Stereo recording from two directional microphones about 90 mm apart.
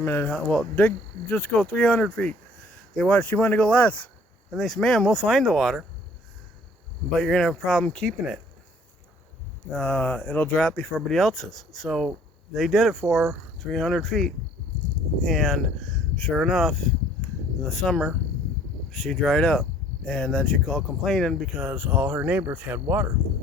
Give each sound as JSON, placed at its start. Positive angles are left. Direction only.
{"t": 0.0, "sound": "speech", "side_deg": 25}
{"t": 0.3, "sound": "speech", "side_deg": 10}
{"t": 2.9, "sound": "speech", "side_deg": 0}
{"t": 3.2, "sound": "speech", "side_deg": 20}
{"t": 7.1, "sound": "speech", "side_deg": 5}
{"t": 9.7, "sound": "speech", "side_deg": 10}
{"t": 11.1, "sound": "speech", "side_deg": 0}